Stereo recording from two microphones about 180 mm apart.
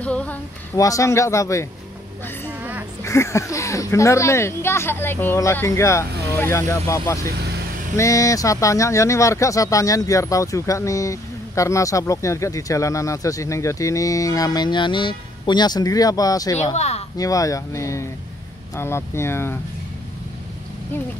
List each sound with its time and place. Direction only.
0.0 s a sound: 5° left (ahead or behind)
0.7 s speech: 20° left (ahead or behind)
3.0 s speech: 15° left (ahead or behind)
7.9 s speech: 15° left (ahead or behind)
16.5 s speech: 35° left (ahead or behind)
17.2 s speech: 20° left (ahead or behind)